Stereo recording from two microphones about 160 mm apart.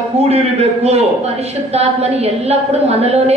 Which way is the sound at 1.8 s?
40° right (ahead or behind).